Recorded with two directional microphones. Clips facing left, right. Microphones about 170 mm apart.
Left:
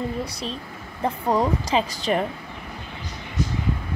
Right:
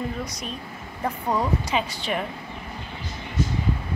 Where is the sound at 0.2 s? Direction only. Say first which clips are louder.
Left 3 dB; 30° left (ahead or behind).